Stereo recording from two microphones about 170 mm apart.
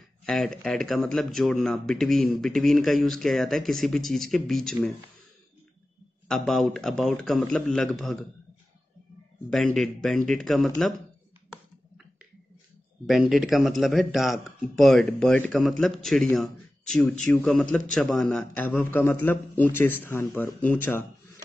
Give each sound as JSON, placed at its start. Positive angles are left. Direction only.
{"t": 0.2, "sound": "speech", "side_deg": 5}
{"t": 6.2, "sound": "speech", "side_deg": 0}
{"t": 9.5, "sound": "speech", "side_deg": 0}
{"t": 13.0, "sound": "a man's voice", "side_deg": 0}